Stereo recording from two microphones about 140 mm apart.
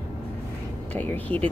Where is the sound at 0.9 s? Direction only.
10° left (ahead or behind).